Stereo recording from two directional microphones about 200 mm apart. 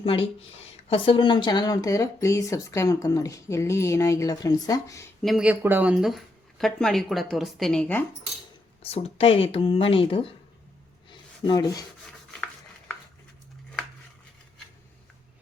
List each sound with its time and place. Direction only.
0.0 s speech: 30° left (ahead or behind)
5.2 s speech: centre (ahead or behind)
8.8 s speech: 30° left (ahead or behind)
11.1 s rub: 20° left (ahead or behind)